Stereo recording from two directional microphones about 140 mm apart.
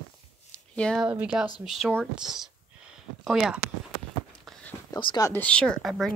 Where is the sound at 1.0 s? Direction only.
10° right (ahead or behind).